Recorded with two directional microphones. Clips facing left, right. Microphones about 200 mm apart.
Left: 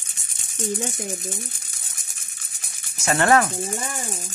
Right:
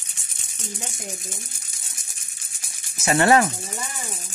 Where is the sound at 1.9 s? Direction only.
55° left (ahead or behind).